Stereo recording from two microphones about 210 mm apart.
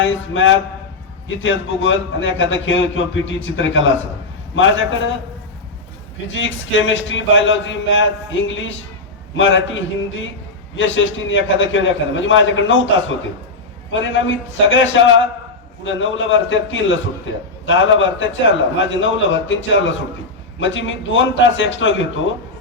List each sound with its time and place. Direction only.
0.0 s a man's voice: 65° left (ahead or behind)
6.3 s a man's voice: 65° left (ahead or behind)